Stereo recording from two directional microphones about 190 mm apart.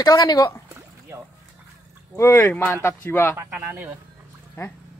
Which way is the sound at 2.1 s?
15° left (ahead or behind).